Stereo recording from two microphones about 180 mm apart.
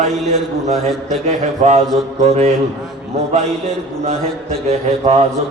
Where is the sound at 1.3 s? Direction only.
40° right (ahead or behind).